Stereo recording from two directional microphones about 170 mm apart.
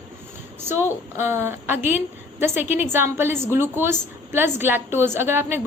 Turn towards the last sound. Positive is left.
turn(degrees=-15)  # may be behind; listen again after turning